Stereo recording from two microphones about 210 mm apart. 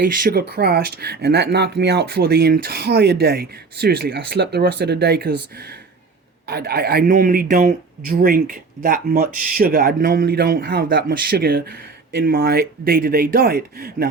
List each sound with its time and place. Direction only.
0.2 s speech: 45° right (ahead or behind)